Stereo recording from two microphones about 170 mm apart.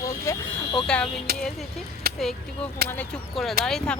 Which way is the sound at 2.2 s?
Centre (ahead or behind).